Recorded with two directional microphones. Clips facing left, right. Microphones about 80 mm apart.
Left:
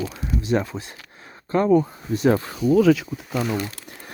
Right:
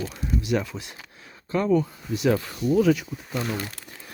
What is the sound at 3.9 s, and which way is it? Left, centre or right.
Crumpling, left.